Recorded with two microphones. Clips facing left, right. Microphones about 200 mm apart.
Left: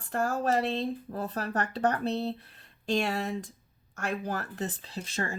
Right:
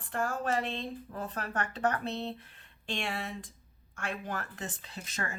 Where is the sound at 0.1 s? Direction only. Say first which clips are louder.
Left 4 dB; 40° left (ahead or behind).